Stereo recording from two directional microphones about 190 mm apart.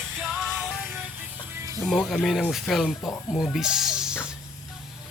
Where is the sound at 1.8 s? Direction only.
Centre (ahead or behind).